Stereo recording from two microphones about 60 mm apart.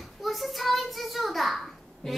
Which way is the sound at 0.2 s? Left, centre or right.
Centre.